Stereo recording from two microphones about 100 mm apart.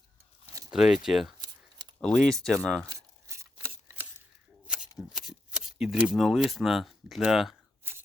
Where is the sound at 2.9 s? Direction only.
30° right (ahead or behind).